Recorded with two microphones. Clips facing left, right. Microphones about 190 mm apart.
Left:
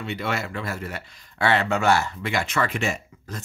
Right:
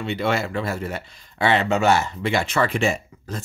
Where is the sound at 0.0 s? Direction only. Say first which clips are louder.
Right 5 dB; 30° right (ahead or behind).